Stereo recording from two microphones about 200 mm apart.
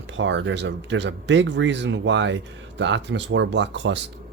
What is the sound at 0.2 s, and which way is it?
Speech, 65° right (ahead or behind).